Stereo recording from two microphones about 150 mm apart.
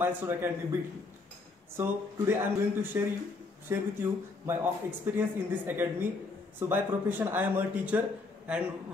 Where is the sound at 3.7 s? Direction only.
15° right (ahead or behind).